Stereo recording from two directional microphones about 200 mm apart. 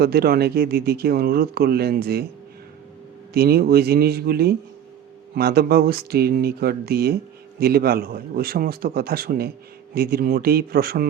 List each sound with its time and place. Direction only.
0.0 s speech: 50° right (ahead or behind)
3.3 s speech: 50° right (ahead or behind)